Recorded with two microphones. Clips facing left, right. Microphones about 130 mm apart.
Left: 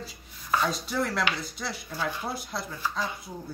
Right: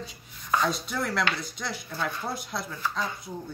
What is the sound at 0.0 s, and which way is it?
Rub, 5° left (ahead or behind).